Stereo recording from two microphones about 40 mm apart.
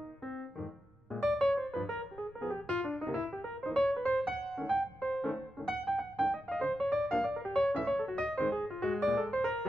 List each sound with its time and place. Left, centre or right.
1.2 s music: centre
2.1 s music: left
4.6 s music: left
5.9 s keyboard: left
6.8 s music: centre
8.6 s music: centre
9.0 s music: centre